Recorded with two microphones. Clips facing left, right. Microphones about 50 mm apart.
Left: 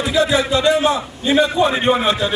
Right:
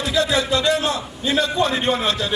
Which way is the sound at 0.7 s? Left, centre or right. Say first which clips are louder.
Left 5 dB; centre.